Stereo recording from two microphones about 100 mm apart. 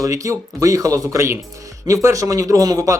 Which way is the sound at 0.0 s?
35° right (ahead or behind).